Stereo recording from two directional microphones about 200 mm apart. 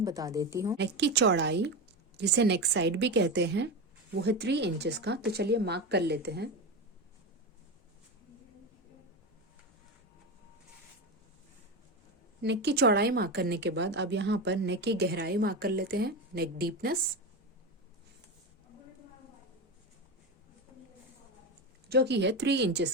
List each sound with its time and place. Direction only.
0.0 s a woman's voice: 15° right (ahead or behind)
0.8 s speech: 60° right (ahead or behind)
12.4 s speech: 55° right (ahead or behind)
21.8 s speech: 55° right (ahead or behind)